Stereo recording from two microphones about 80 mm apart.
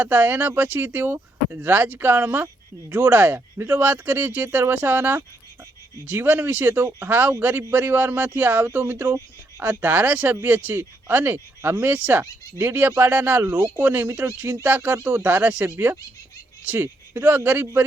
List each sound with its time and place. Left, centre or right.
0.0 s speech: right
12.2 s speech: right
13.0 s speech: right
15.7 s speech: right